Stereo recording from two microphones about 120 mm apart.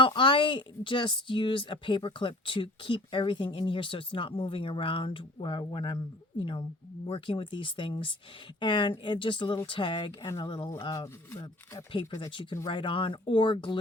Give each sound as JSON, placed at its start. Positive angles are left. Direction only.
{"t": 0.0, "sound": "speech", "side_deg": 45}
{"t": 10.9, "sound": "speech", "side_deg": 25}
{"t": 12.2, "sound": "speech", "side_deg": 40}